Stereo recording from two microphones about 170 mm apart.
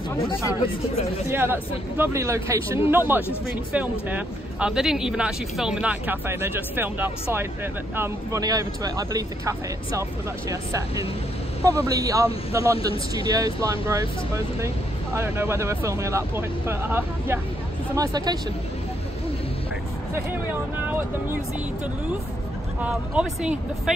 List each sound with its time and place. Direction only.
1.3 s speech: 10° right (ahead or behind)
20.8 s speech: 10° right (ahead or behind)
22.8 s speech: 5° right (ahead or behind)